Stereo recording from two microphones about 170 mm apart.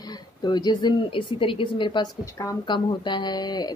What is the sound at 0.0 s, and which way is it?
Speech, 25° left (ahead or behind).